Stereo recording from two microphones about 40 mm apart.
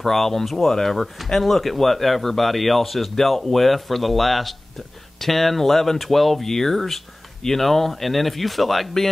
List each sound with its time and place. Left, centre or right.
0.0 s speech: centre